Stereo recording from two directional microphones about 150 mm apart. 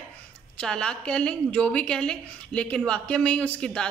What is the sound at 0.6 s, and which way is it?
A woman's voice, 5° left (ahead or behind).